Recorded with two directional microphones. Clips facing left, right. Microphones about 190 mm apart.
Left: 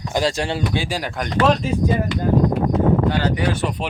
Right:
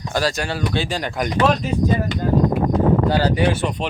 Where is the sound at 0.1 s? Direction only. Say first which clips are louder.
Left 1 dB; 25° left (ahead or behind).